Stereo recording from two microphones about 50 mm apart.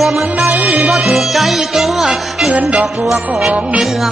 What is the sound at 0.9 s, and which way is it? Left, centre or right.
Music, centre.